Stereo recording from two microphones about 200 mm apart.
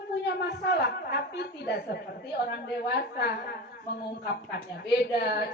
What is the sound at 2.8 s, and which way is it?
A woman's voice, 55° left (ahead or behind).